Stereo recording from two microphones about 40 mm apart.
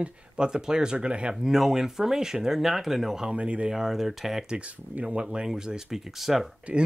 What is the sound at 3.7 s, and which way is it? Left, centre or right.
Speech, centre.